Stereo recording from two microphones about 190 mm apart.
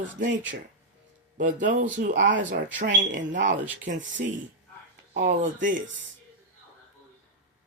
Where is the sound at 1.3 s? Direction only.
40° right (ahead or behind).